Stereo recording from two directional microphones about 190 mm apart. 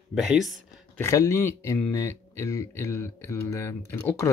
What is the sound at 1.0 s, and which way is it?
Speech, 15° left (ahead or behind).